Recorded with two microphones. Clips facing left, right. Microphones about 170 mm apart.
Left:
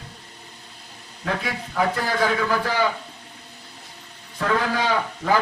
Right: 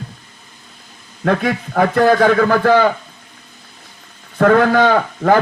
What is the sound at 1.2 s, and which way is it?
A man's voice, 65° right (ahead or behind).